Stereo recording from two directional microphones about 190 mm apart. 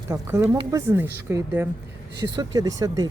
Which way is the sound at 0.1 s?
15° right (ahead or behind).